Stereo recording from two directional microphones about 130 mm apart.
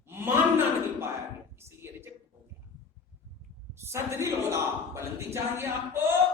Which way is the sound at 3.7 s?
20° right (ahead or behind).